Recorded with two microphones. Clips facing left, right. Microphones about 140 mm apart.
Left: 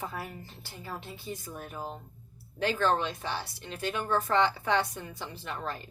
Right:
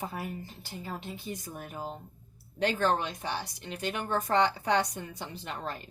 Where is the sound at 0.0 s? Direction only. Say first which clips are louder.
Right 2 dB; 15° right (ahead or behind).